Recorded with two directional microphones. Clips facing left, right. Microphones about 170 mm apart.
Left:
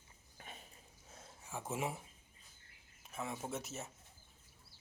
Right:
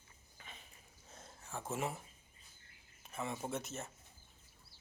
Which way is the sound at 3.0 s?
5° left (ahead or behind).